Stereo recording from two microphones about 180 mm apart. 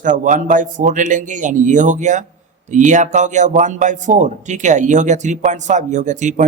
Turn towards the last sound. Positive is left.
turn(degrees=-45)  # may be behind; listen again after turning